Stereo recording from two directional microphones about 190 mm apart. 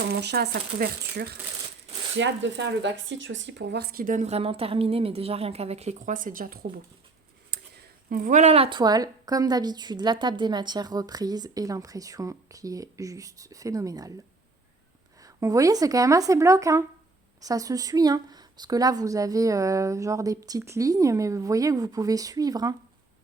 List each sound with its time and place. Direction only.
0.1 s speech: 60° right (ahead or behind)
2.1 s speech: 70° right (ahead or behind); by 6.7 s 50° right (ahead or behind)
8.1 s speech: 40° right (ahead or behind); by 14.1 s 20° right (ahead or behind)
15.2 s a woman's voice: 15° right (ahead or behind)